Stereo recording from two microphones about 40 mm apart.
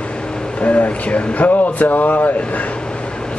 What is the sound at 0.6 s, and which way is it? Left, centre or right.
Speech, left.